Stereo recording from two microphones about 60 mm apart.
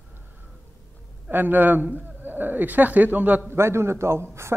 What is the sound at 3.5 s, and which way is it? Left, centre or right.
Speech, right.